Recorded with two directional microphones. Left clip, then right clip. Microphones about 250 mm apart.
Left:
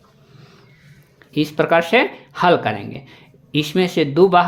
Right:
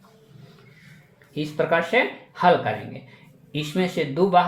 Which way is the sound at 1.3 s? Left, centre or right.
Left.